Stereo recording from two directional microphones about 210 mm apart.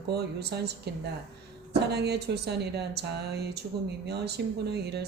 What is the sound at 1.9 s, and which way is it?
Speech, 50° right (ahead or behind).